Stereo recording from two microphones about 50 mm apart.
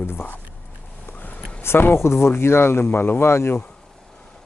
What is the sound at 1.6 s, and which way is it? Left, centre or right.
Speech, left.